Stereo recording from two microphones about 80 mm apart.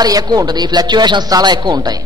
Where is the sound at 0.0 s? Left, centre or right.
Right.